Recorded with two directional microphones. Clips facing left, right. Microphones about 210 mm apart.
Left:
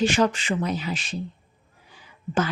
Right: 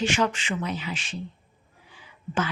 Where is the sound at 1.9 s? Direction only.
40° left (ahead or behind).